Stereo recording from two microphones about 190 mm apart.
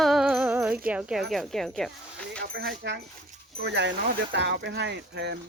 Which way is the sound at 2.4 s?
60° right (ahead or behind).